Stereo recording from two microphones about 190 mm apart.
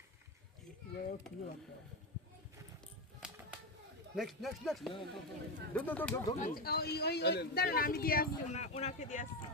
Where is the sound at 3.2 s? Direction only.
5° right (ahead or behind).